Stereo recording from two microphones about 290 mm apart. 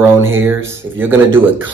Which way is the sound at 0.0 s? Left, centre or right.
Centre.